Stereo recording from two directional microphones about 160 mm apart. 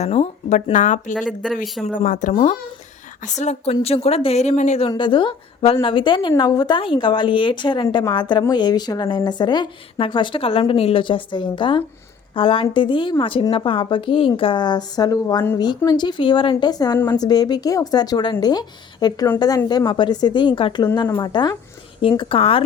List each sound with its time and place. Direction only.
0.0 s speech: 40° left (ahead or behind)
1.3 s speech: 5° left (ahead or behind)
1.8 s speech: 50° left (ahead or behind)
4.9 s a woman's voice: 30° left (ahead or behind)